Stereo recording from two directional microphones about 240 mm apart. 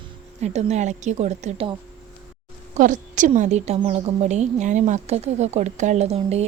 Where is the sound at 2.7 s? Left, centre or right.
Right.